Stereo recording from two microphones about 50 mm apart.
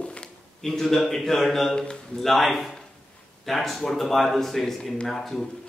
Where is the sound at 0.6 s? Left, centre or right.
Centre.